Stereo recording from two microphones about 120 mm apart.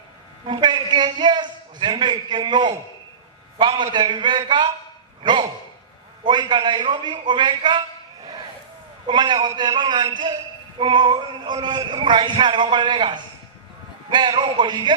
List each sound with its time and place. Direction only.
0.4 s a man's voice: 40° right (ahead or behind)
5.2 s a sound: 40° right (ahead or behind)
6.2 s a man's voice: 40° right (ahead or behind)
9.0 s a man's voice: 40° right (ahead or behind)